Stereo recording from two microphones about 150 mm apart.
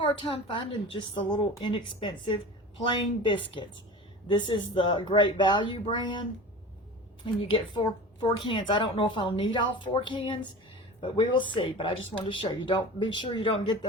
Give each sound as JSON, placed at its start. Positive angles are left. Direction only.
{"t": 0.0, "sound": "a woman's voice", "side_deg": 35}
{"t": 4.3, "sound": "a woman's voice", "side_deg": 30}
{"t": 7.3, "sound": "a woman's voice", "side_deg": 35}